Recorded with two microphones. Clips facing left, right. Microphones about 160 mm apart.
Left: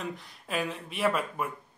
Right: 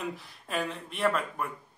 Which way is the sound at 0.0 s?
5° right (ahead or behind).